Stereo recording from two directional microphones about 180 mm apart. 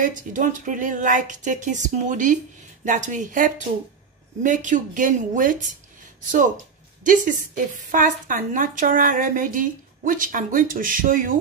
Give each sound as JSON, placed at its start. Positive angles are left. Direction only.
{"t": 0.0, "sound": "a woman's voice", "side_deg": -45}
{"t": 7.1, "sound": "a woman's voice", "side_deg": -45}